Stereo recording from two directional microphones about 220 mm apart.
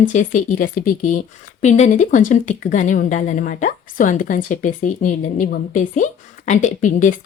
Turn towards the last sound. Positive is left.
turn(degrees=35)  # may be behind; listen again after turning